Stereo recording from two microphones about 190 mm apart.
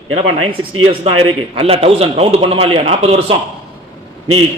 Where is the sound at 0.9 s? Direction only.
30° right (ahead or behind).